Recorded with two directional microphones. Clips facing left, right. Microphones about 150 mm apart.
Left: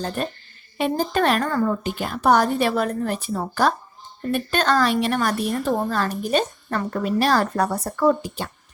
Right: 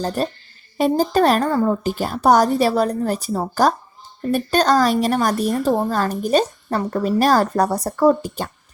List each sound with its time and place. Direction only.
0.0 s a woman's voice: 35° right (ahead or behind)